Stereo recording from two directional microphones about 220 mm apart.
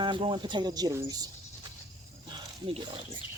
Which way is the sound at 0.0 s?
20° right (ahead or behind).